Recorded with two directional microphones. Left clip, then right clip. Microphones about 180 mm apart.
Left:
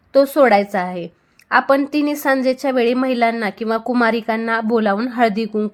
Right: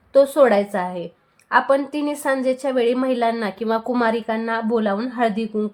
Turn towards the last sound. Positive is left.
turn(degrees=30)  # may be behind; listen again after turning